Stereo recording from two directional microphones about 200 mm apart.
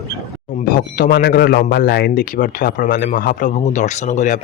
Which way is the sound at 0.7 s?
45° left (ahead or behind).